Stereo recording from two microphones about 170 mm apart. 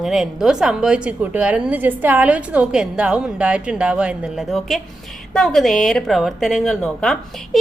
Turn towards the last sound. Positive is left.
turn(degrees=5)  # may be behind; listen again after turning